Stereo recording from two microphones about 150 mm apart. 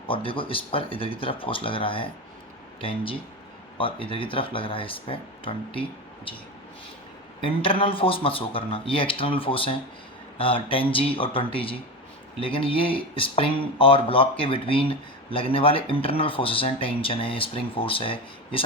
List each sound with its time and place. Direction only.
0.1 s speech: 35° left (ahead or behind)
7.4 s speech: 35° left (ahead or behind)